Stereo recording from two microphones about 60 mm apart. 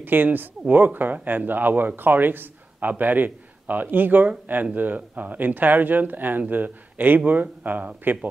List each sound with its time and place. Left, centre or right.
0.0 s speech: right